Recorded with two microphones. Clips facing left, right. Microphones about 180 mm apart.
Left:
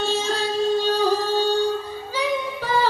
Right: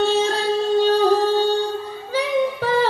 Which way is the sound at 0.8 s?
60° right (ahead or behind).